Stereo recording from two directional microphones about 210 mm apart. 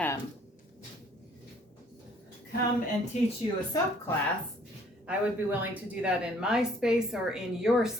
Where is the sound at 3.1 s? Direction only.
35° left (ahead or behind).